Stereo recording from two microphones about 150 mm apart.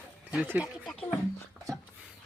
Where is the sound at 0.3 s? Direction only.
10° right (ahead or behind).